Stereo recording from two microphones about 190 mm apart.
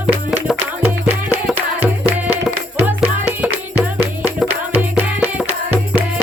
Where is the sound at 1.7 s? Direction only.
35° right (ahead or behind).